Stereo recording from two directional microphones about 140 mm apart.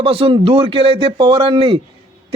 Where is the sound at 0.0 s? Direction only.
40° right (ahead or behind).